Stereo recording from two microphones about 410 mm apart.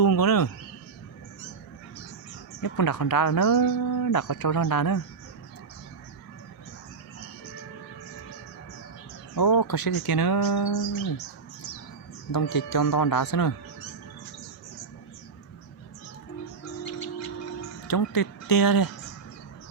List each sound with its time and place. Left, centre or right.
0.0 s speech: left
2.6 s speech: left
9.3 s speech: left
12.5 s speech: left
16.8 s music: left
17.8 s speech: left